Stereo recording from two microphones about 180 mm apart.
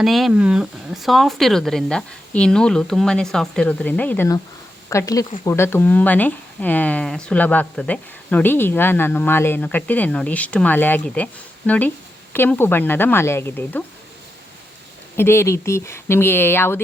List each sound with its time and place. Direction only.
0.0 s speech: centre (ahead or behind)
15.1 s speech: 15° left (ahead or behind)